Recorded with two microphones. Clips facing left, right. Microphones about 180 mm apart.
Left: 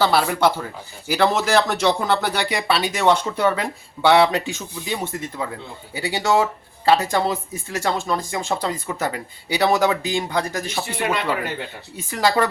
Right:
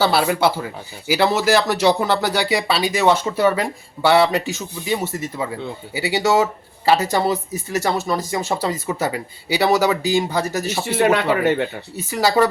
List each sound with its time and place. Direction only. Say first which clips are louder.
0.0 s speech: right 1 dB; 5° right (ahead or behind)
10.8 s speech: right 8 dB; 70° right (ahead or behind)
11.9 s speech: right 3 dB; 5° right (ahead or behind)